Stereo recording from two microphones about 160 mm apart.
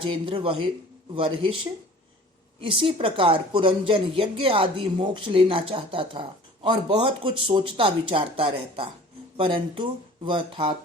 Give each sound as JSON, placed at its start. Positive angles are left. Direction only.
{"t": 0.0, "sound": "a woman's voice", "side_deg": -30}
{"t": 2.6, "sound": "a woman's voice", "side_deg": -35}